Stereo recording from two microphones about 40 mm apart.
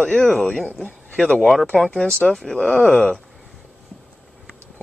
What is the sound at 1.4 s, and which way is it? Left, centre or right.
Speech, centre.